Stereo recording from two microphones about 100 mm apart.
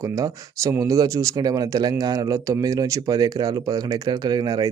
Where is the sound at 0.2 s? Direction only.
30° right (ahead or behind).